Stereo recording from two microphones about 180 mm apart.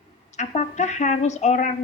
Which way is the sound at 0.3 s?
40° left (ahead or behind).